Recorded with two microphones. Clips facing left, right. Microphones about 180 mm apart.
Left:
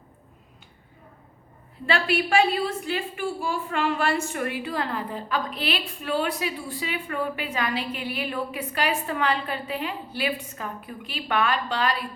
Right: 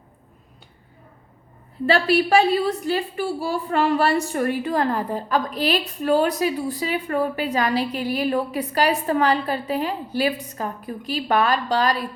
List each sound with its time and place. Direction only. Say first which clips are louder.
1.9 s a woman's voice: right 6 dB; 40° right (ahead or behind)